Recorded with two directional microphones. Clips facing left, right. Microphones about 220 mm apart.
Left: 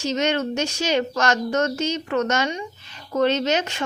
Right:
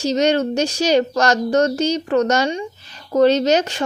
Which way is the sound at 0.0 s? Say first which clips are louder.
Right 6 dB; 35° right (ahead or behind).